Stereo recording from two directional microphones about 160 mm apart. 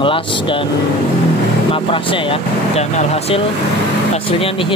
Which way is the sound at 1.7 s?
35° left (ahead or behind).